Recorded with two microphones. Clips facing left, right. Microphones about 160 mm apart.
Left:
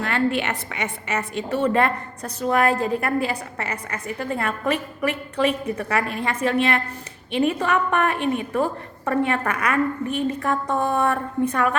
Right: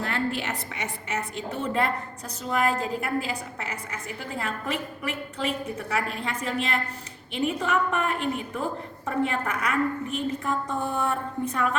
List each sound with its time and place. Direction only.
0.0 s a woman's voice: 70° left (ahead or behind)